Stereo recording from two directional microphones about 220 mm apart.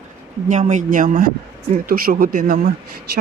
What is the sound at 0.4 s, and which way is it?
Speech, 35° right (ahead or behind).